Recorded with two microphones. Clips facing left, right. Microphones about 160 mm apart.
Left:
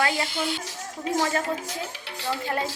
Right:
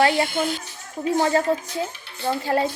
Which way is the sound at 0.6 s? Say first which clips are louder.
Right 4 dB; 90° left.